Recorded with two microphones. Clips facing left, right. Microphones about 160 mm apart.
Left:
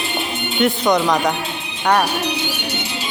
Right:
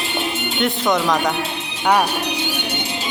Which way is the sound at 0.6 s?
Centre (ahead or behind).